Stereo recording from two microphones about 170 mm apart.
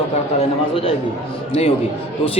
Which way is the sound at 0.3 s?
35° left (ahead or behind).